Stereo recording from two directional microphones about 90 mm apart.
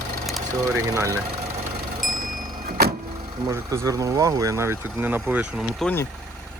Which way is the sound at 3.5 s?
40° right (ahead or behind).